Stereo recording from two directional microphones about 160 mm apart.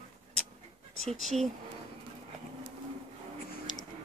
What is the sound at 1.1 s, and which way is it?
Speech, centre (ahead or behind).